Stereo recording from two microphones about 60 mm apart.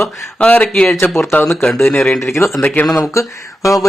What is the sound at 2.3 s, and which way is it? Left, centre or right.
Speech, left.